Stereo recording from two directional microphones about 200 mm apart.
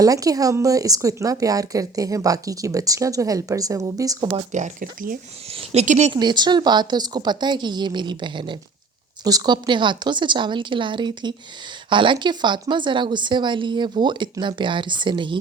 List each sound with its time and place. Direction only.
0.0 s speech: 15° right (ahead or behind); by 6.1 s 35° right (ahead or behind)
6.1 s speech: 20° right (ahead or behind)